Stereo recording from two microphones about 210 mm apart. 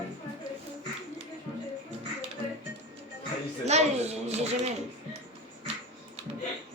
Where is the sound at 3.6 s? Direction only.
30° right (ahead or behind).